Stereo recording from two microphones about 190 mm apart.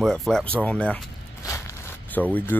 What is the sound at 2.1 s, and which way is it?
Speech, 10° left (ahead or behind).